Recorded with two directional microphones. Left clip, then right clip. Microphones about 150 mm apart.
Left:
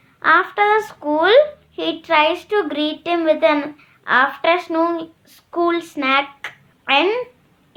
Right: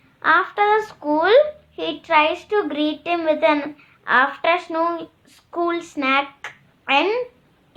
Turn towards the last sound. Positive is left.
turn(degrees=35)  # may be behind; listen again after turning